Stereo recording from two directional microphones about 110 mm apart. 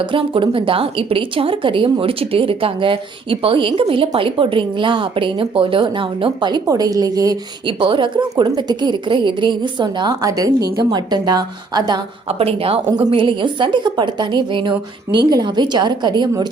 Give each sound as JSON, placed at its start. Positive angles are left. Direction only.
{"t": 0.0, "sound": "a woman's voice", "side_deg": -50}
{"t": 7.7, "sound": "a woman's voice", "side_deg": -50}
{"t": 12.3, "sound": "a woman's voice", "side_deg": -65}
{"t": 13.1, "sound": "a woman's voice", "side_deg": -45}